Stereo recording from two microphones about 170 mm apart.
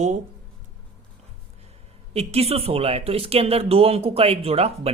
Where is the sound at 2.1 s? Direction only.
35° right (ahead or behind).